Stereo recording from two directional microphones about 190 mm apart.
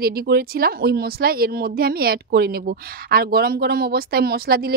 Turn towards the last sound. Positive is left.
turn(degrees=-50)  # may be behind; listen again after turning